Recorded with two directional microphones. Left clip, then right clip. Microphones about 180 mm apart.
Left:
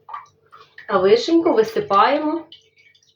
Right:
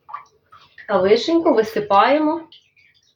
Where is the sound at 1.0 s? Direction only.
25° right (ahead or behind).